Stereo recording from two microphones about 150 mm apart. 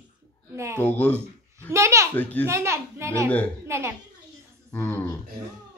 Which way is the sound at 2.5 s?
20° right (ahead or behind).